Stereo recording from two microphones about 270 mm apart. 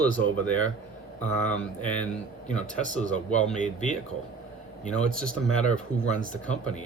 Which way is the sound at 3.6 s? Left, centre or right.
Left.